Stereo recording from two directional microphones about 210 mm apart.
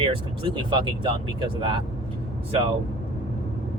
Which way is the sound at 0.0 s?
25° right (ahead or behind).